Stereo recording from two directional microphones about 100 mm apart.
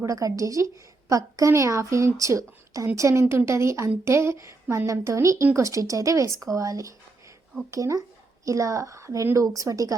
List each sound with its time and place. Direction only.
0.0 s a woman's voice: 35° right (ahead or behind)